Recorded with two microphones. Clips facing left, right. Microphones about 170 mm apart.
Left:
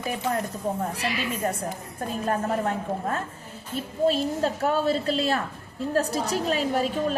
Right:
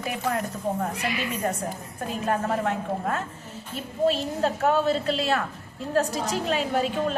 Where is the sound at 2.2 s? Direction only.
35° left (ahead or behind).